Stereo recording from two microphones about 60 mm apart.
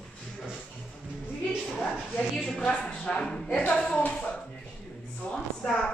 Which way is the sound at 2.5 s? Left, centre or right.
Centre.